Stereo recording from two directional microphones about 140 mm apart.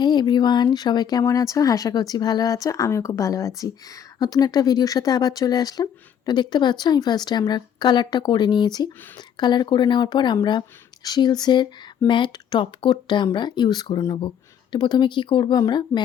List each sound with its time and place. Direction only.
0.0 s speech: 30° left (ahead or behind)